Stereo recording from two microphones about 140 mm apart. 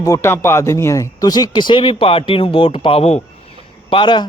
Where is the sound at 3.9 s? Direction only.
35° left (ahead or behind).